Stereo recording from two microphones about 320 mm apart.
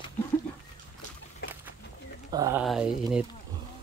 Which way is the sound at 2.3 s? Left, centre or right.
Centre.